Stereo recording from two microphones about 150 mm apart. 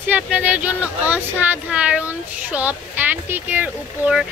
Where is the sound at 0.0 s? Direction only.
10° right (ahead or behind).